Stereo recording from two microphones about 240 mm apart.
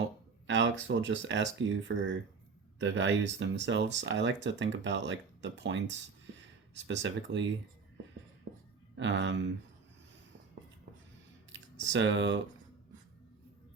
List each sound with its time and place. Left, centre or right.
0.4 s speech: right
9.0 s speech: right
11.5 s speech: right